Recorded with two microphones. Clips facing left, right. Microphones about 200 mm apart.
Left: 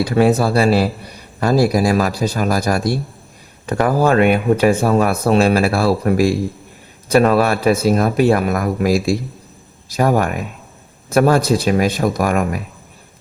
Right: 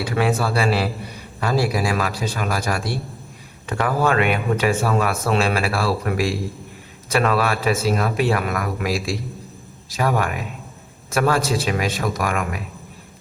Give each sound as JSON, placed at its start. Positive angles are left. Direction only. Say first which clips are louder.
{"t": 0.0, "sound": "speech", "louder": "left 7 dB", "side_deg": 40}